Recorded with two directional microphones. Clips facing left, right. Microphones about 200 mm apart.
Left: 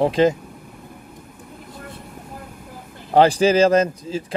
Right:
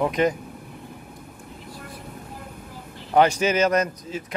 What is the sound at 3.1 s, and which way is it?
Speech, 30° left (ahead or behind).